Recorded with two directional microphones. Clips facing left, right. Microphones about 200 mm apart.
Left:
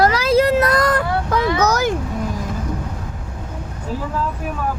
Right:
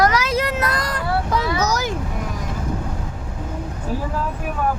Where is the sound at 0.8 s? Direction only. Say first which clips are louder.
Left 5 dB; 55° left (ahead or behind).